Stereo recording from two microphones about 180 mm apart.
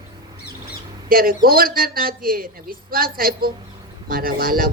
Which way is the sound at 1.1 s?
55° right (ahead or behind).